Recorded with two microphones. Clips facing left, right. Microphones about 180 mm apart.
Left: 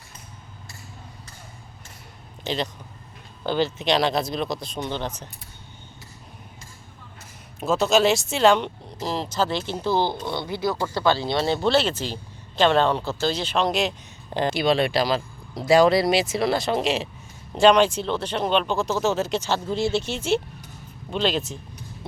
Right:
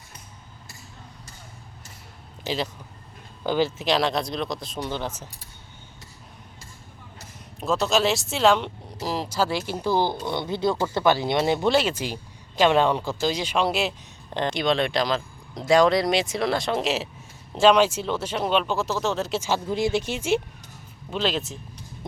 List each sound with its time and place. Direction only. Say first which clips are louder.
2.4 s speech: left 1 dB; 5° right (ahead or behind)
7.6 s speech: left 3 dB; centre (ahead or behind)
14.3 s speech: left 2 dB; 5° left (ahead or behind)
19.4 s speech: even; 10° right (ahead or behind)